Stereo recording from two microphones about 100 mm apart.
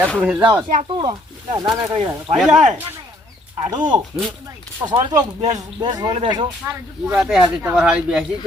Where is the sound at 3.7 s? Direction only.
50° right (ahead or behind).